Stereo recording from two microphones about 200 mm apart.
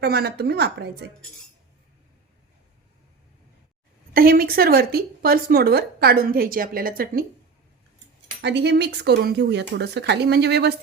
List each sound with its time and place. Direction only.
0.0 s speech: 55° right (ahead or behind)
4.1 s a woman's voice: 45° right (ahead or behind)
8.4 s speech: 60° right (ahead or behind)